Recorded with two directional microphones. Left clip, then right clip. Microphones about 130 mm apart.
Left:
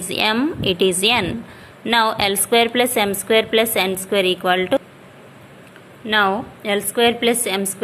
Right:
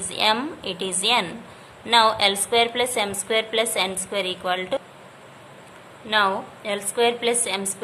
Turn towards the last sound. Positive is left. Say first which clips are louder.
# left 5 dB
turn(degrees=35)  # may be behind; listen again after turning